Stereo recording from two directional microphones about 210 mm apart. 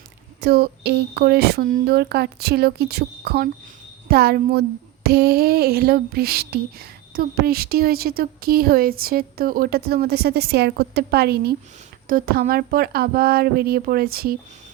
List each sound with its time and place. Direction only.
0.4 s speech: 50° right (ahead or behind)